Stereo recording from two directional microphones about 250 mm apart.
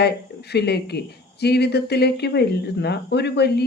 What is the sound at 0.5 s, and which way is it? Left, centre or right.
Speech, left.